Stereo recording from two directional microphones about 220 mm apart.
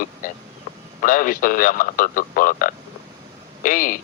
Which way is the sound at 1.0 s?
40° left (ahead or behind).